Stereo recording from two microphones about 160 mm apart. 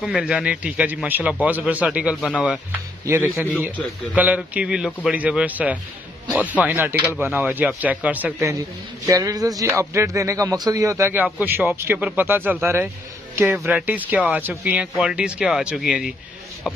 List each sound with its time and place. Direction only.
0.0 s speech: 5° right (ahead or behind)